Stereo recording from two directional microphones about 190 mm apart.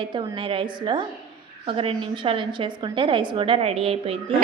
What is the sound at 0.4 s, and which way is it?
A woman's voice, 25° right (ahead or behind).